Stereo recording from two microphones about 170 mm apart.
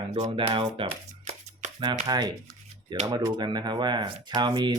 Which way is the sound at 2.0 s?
20° right (ahead or behind).